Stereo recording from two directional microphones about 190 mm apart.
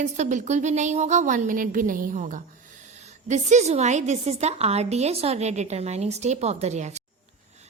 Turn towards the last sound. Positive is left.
turn(degrees=-35)  # may be behind; listen again after turning